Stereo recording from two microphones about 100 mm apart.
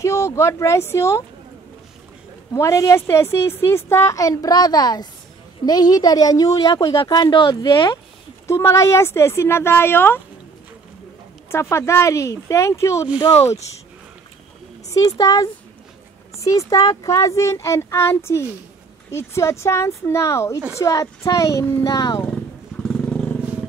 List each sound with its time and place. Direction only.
0.0 s speech: 30° left (ahead or behind)
2.5 s a woman's voice: 30° left (ahead or behind)
8.5 s speech: 30° left (ahead or behind)
11.5 s speech: 30° left (ahead or behind)
14.9 s a woman's voice: 40° left (ahead or behind)
22.9 s vehicle: 5° left (ahead or behind)